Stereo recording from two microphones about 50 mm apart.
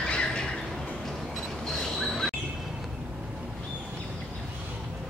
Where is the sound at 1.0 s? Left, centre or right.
Centre.